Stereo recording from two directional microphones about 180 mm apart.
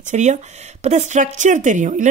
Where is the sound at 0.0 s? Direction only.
40° right (ahead or behind).